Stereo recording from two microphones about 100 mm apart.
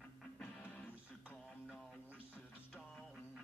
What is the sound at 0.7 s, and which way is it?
Music, 15° left (ahead or behind).